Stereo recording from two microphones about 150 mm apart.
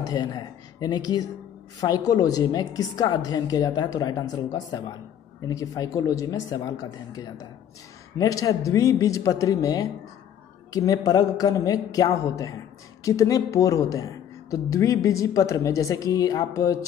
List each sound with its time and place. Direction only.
0.0 s a woman's voice: 25° left (ahead or behind)